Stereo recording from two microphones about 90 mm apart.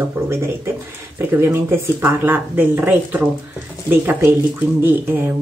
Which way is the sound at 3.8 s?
25° right (ahead or behind).